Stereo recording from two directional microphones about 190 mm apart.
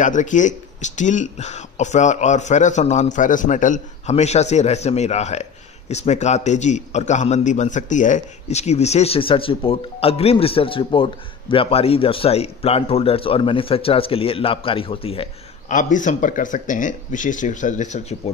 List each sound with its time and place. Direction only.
0.0 s speech: 40° left (ahead or behind)
15.7 s speech: 40° left (ahead or behind)